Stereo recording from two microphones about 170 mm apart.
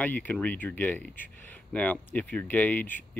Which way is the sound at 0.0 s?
10° left (ahead or behind).